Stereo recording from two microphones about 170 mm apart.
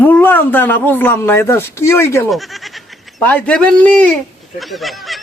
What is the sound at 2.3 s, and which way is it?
Speech, centre (ahead or behind).